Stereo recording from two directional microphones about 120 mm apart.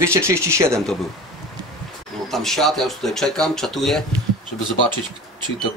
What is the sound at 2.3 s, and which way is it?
Speech, 5° left (ahead or behind).